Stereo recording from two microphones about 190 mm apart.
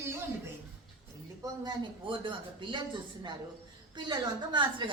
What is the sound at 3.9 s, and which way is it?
Speech, 25° right (ahead or behind).